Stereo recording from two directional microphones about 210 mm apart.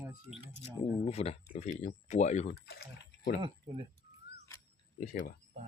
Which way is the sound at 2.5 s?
50° left (ahead or behind).